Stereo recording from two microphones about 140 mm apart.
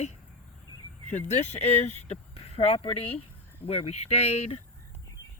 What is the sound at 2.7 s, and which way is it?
Speech, 40° left (ahead or behind).